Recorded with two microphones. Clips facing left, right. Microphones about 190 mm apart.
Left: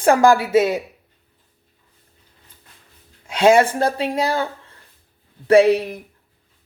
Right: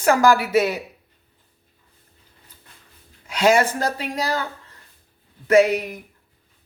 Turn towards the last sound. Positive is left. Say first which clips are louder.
# left 3 dB
turn(degrees=30)  # may be behind; listen again after turning